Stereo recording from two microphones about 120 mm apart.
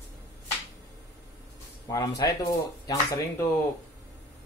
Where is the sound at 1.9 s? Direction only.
30° left (ahead or behind).